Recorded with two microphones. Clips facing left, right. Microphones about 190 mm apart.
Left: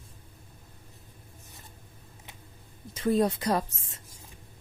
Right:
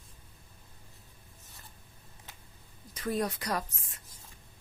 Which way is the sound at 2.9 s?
25° left (ahead or behind).